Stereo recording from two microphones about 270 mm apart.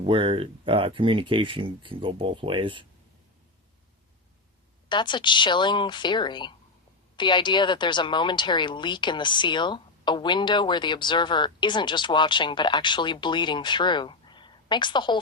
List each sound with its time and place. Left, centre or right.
0.0 s speech: centre
4.9 s speech: centre